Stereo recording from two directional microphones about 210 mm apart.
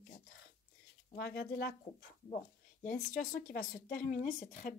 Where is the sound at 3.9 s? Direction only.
40° left (ahead or behind).